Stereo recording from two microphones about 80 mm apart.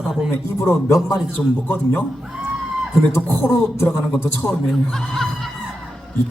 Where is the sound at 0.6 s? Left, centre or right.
Left.